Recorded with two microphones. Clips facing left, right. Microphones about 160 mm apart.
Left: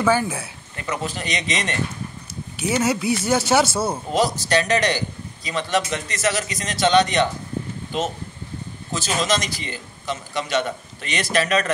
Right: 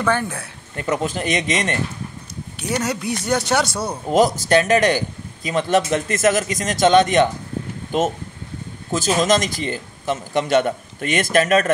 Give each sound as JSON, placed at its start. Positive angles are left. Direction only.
{"t": 0.0, "sound": "speech", "side_deg": 5}
{"t": 1.0, "sound": "speech", "side_deg": -50}
{"t": 2.6, "sound": "speech", "side_deg": 5}
{"t": 4.1, "sound": "speech", "side_deg": -50}